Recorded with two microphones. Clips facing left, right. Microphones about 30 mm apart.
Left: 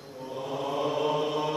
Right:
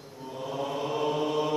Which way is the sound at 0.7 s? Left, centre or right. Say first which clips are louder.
Left 2 dB; centre.